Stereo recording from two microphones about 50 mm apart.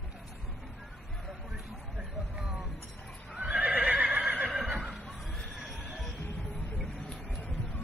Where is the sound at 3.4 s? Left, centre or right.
Right.